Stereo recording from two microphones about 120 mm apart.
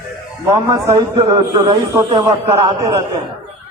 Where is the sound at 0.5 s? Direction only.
30° right (ahead or behind).